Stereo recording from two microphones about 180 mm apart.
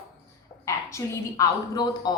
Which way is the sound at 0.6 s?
15° left (ahead or behind).